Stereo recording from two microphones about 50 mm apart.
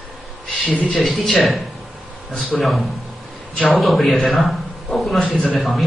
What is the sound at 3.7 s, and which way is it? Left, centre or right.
A man's voice, centre.